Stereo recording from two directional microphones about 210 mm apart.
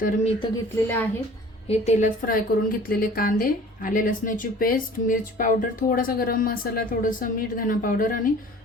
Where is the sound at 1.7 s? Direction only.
35° left (ahead or behind).